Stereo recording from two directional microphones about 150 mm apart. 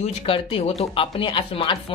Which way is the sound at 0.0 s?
40° left (ahead or behind).